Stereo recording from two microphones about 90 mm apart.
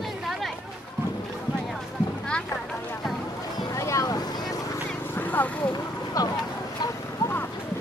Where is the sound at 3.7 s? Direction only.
35° left (ahead or behind).